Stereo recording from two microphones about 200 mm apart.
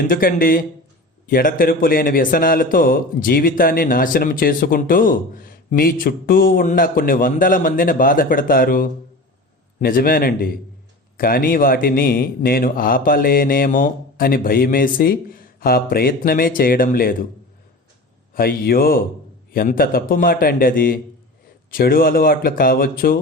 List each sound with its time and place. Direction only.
0.1 s a man's voice: 45° left (ahead or behind)
18.3 s a man's voice: 50° left (ahead or behind)